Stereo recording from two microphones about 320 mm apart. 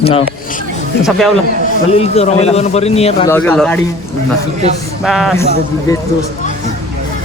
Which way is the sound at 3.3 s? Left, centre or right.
Centre.